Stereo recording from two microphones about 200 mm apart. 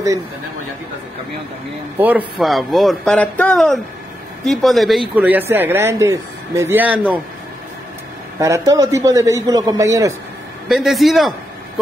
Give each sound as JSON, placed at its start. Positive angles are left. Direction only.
{"t": 2.0, "sound": "speech", "side_deg": -10}
{"t": 8.4, "sound": "speech", "side_deg": -15}
{"t": 10.7, "sound": "speech", "side_deg": 0}